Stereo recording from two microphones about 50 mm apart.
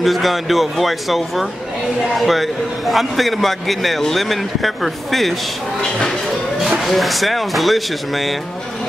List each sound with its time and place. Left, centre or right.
0.0 s a man's voice: centre
5.8 s speech: centre
6.8 s a man's voice: centre